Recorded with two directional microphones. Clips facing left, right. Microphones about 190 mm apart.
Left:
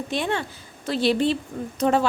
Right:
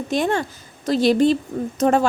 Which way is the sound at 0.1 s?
45° right (ahead or behind).